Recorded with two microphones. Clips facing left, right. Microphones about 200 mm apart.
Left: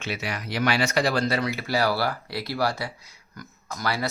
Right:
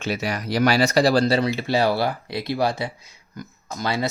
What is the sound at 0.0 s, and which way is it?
Speech, 40° right (ahead or behind).